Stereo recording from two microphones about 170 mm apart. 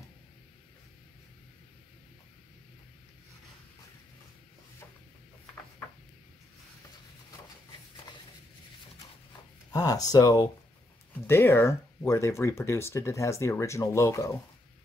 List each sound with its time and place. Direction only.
9.7 s speech: 20° left (ahead or behind)